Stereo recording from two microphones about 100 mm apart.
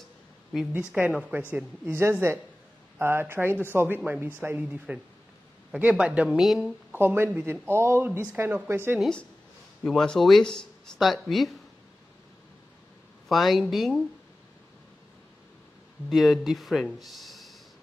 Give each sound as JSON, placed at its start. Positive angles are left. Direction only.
{"t": 0.7, "sound": "a woman's voice", "side_deg": -15}
{"t": 6.9, "sound": "speech", "side_deg": -20}
{"t": 9.8, "sound": "speech", "side_deg": 5}
{"t": 13.3, "sound": "speech", "side_deg": 0}
{"t": 16.1, "sound": "speech", "side_deg": 0}